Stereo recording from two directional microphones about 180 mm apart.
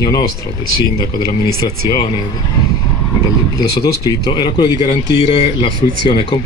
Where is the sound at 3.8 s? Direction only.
25° left (ahead or behind).